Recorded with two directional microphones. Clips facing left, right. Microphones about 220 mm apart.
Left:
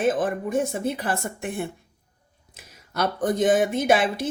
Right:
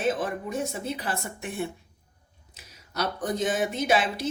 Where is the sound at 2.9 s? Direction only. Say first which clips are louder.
Left 5 dB; 55° left (ahead or behind).